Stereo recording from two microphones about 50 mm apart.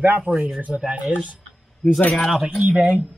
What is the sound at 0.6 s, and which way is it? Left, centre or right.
Speech, right.